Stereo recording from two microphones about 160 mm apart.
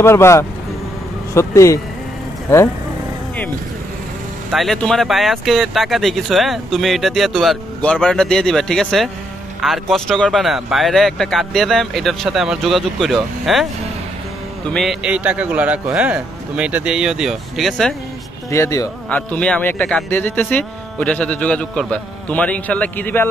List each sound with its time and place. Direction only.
0.0 s speech: 15° left (ahead or behind)
4.5 s speech: centre (ahead or behind)
14.7 s speech: centre (ahead or behind)
18.5 s speech: 20° left (ahead or behind)
19.0 s speech: 10° left (ahead or behind)